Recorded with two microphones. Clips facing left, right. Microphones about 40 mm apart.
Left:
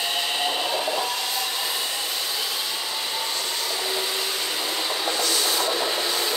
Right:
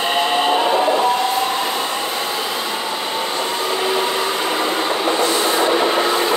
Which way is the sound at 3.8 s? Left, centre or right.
Right.